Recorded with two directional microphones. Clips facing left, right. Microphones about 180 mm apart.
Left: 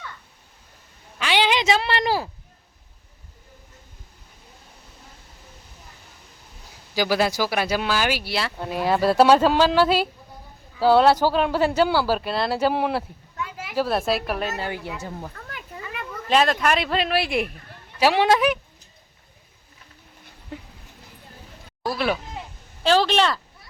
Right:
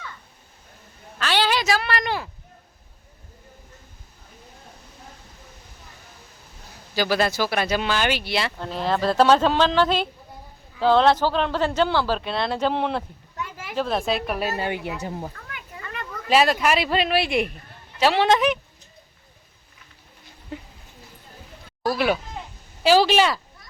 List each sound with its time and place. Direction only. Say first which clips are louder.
1.2 s a woman's voice: left 1 dB; 15° left (ahead or behind); by 2.3 s 35° left (ahead or behind)
6.9 s speech: left 1 dB; 10° left (ahead or behind)
13.4 s a sound: left 1 dB; 50° right (ahead or behind)
13.7 s speech: left 1 dB; 5° left (ahead or behind)
14.6 s speech: right 3 dB; 15° right (ahead or behind)
15.4 s a sound: left 3 dB; 35° left (ahead or behind)
15.8 s a sound: even; 5° left (ahead or behind)
16.3 s speech: right 1 dB; 5° right (ahead or behind)
17.9 s speech: even; 10° left (ahead or behind)
21.9 s speech: right 1 dB; centre (ahead or behind)